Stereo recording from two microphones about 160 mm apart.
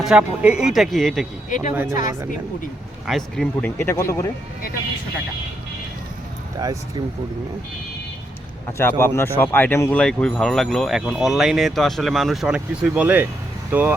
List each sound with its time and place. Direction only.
0.0 s speech: 5° right (ahead or behind)
1.7 s speech: 10° right (ahead or behind)
3.1 s speech: centre (ahead or behind)
3.8 s speech: 15° left (ahead or behind)
6.6 s speech: 25° right (ahead or behind)
8.8 s speech: 15° left (ahead or behind); by 13.9 s 10° right (ahead or behind)